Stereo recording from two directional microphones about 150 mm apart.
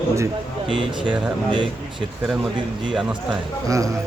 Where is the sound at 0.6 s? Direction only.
35° right (ahead or behind).